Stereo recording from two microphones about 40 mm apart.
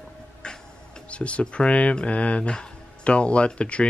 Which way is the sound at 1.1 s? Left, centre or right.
Left.